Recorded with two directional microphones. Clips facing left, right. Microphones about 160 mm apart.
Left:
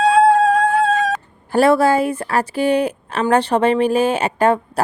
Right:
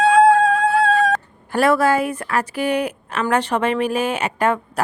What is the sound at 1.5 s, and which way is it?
A woman's voice, 30° left (ahead or behind).